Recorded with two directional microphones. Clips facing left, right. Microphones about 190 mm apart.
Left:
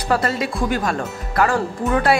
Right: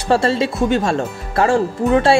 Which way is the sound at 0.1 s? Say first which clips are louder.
Right 5 dB; 25° right (ahead or behind).